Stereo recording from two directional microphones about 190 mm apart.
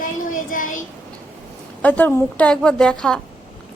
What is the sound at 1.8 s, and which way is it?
A woman's voice, 10° left (ahead or behind).